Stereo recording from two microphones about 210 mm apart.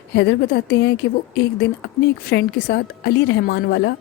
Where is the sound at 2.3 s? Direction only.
50° left (ahead or behind).